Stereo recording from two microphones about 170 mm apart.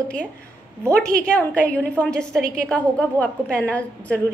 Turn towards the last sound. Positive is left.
turn(degrees=10)  # may be behind; listen again after turning